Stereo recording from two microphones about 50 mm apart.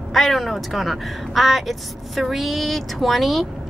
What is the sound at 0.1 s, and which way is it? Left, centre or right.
A woman's voice, centre.